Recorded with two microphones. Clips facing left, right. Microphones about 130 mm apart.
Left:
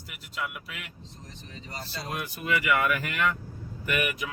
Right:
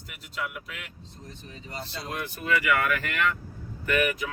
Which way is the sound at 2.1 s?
15° left (ahead or behind).